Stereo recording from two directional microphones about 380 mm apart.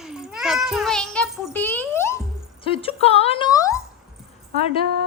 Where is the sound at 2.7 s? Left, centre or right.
Centre.